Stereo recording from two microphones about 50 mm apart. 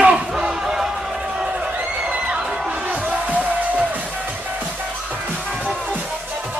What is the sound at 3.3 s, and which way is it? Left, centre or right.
Music, right.